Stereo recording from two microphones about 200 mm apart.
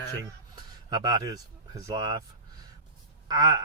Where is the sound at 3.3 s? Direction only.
20° right (ahead or behind).